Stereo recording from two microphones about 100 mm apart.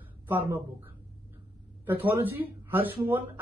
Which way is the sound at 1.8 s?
20° right (ahead or behind).